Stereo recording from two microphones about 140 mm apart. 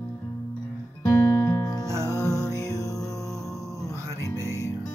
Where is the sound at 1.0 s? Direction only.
15° left (ahead or behind).